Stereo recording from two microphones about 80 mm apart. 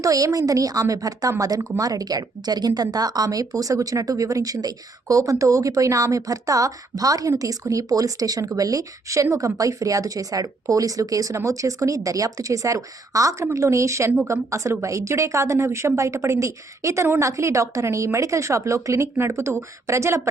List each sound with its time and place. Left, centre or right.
0.0 s a woman's voice: right